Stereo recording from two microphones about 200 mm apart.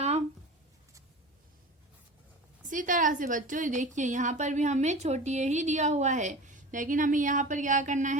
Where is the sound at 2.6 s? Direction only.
40° right (ahead or behind).